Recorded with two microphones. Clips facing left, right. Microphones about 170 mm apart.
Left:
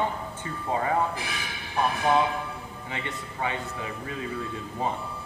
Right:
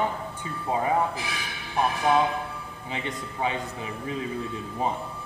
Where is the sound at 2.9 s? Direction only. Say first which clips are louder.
Right 3 dB; 20° right (ahead or behind).